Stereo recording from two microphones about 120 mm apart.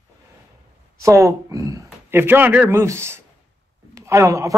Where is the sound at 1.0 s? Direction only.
25° right (ahead or behind).